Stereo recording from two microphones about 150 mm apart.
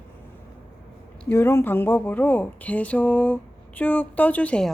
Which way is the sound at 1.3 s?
15° left (ahead or behind).